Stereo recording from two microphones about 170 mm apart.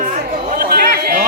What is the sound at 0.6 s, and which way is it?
Speech, 65° right (ahead or behind).